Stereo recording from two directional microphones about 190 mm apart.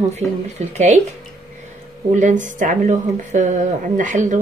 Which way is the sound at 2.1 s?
40° right (ahead or behind).